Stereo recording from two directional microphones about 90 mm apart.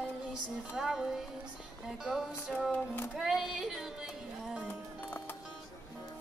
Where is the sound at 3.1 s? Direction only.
Centre (ahead or behind).